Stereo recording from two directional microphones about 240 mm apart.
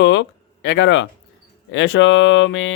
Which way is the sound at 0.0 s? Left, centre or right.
Left.